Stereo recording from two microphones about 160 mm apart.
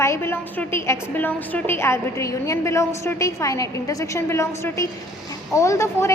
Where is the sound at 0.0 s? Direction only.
15° left (ahead or behind).